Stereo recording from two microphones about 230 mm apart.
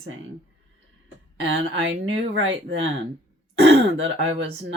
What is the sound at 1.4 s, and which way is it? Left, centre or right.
Speech, right.